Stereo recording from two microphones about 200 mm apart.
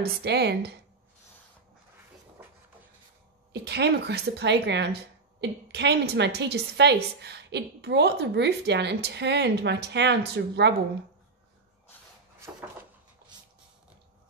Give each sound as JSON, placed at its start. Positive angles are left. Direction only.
{"t": 0.0, "sound": "a woman's voice", "side_deg": -55}
{"t": 3.6, "sound": "a woman's voice", "side_deg": -55}
{"t": 12.5, "sound": "a sound", "side_deg": -15}